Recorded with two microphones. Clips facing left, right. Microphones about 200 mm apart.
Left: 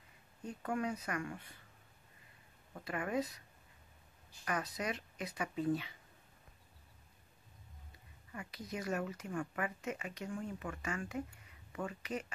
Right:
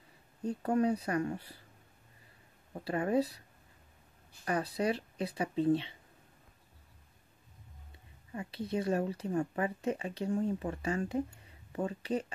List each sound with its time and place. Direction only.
0.4 s speech: 40° right (ahead or behind)
2.7 s speech: 35° right (ahead or behind)
4.5 s speech: 30° right (ahead or behind)
8.3 s speech: 25° right (ahead or behind)